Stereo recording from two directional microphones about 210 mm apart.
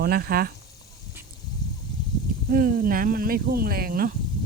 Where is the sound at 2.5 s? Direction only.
45° right (ahead or behind).